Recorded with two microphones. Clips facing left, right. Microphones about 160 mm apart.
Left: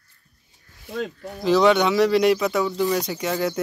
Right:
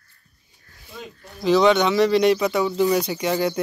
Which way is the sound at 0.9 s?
80° left.